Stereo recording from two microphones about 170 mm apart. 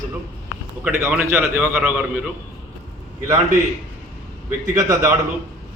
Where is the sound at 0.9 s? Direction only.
10° right (ahead or behind).